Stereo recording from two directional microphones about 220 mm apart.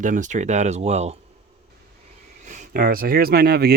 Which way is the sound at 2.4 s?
35° right (ahead or behind).